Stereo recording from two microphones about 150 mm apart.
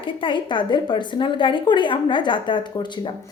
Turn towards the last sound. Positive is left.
turn(degrees=30)  # may be behind; listen again after turning